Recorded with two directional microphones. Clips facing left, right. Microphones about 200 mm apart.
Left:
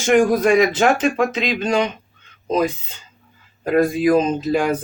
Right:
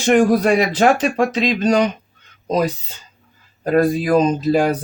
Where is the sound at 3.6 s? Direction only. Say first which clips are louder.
Even; 35° right (ahead or behind).